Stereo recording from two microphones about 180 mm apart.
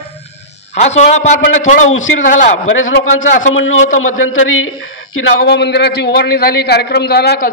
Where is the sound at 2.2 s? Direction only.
45° left (ahead or behind).